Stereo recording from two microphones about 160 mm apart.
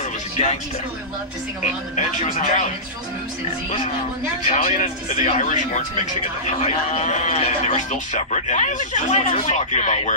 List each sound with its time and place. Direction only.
2.3 s speech: 50° left (ahead or behind)
4.5 s speech: 55° left (ahead or behind)
6.6 s speech: 40° left (ahead or behind)